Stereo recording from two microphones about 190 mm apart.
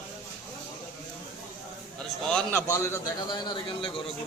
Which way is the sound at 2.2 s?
5° left (ahead or behind).